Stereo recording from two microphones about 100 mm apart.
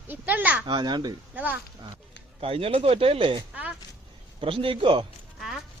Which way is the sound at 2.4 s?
70° right (ahead or behind).